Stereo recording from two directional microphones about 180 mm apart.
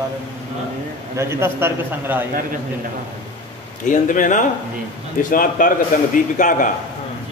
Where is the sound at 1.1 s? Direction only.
15° right (ahead or behind).